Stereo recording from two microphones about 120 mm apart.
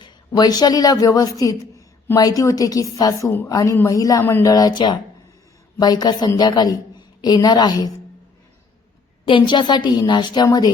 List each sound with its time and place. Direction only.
0.0 s a woman's voice: 35° left (ahead or behind)
3.5 s a man's voice: 30° left (ahead or behind)
4.2 s a sound: 15° left (ahead or behind)
4.4 s a man's voice: 30° left (ahead or behind)
9.2 s a man's voice: 40° left (ahead or behind)